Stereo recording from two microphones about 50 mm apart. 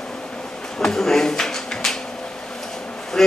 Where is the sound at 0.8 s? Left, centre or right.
Centre.